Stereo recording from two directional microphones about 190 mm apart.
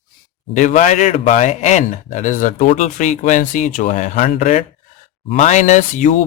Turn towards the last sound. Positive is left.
turn(degrees=40)  # may be behind; listen again after turning